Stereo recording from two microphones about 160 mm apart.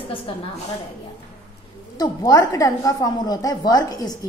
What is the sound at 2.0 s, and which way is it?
A woman's voice, 20° left (ahead or behind).